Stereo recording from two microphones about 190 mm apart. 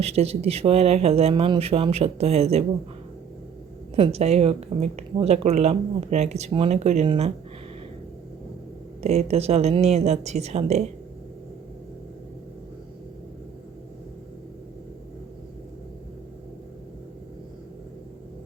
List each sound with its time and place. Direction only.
0.0 s speech: 35° right (ahead or behind)
3.9 s speech: 30° right (ahead or behind)
9.0 s speech: 35° right (ahead or behind)